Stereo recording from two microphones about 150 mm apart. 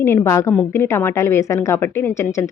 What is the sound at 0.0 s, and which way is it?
Speech, 15° left (ahead or behind).